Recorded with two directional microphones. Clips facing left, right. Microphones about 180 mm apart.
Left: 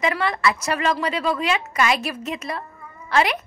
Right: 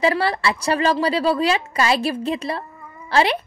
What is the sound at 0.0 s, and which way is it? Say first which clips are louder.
A woman's voice: right 2 dB; 35° right (ahead or behind).